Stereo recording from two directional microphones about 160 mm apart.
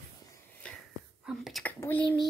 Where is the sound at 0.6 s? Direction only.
5° left (ahead or behind).